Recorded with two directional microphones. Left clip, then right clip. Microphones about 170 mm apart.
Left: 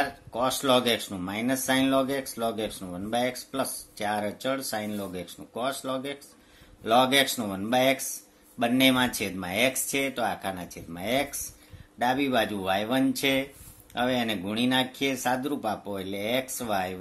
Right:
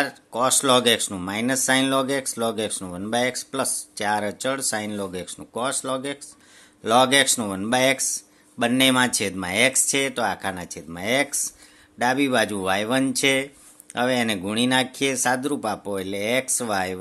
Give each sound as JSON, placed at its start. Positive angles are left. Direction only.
{"t": 0.0, "sound": "speech", "side_deg": -50}